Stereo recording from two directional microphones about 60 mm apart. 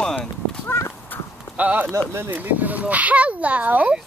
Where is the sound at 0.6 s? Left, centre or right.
Left.